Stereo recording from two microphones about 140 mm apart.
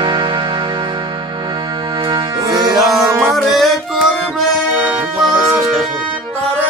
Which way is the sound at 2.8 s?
Centre (ahead or behind).